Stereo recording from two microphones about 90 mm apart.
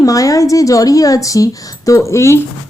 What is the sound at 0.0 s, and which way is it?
A woman's voice, 40° left (ahead or behind).